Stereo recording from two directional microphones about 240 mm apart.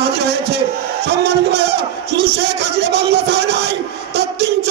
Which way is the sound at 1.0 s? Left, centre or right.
Right.